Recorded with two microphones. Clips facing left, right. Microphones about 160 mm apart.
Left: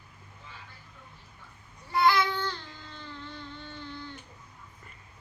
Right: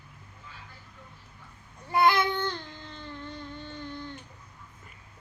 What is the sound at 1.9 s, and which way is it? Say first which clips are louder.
Babbling: right 1 dB; 50° right (ahead or behind).